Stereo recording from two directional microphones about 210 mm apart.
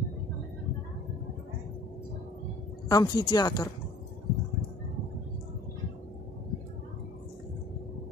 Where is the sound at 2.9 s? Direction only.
20° left (ahead or behind).